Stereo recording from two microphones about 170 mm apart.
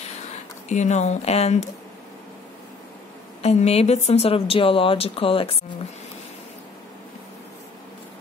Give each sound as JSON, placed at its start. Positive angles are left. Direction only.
{"t": 0.7, "sound": "speech", "side_deg": 45}
{"t": 3.4, "sound": "speech", "side_deg": 40}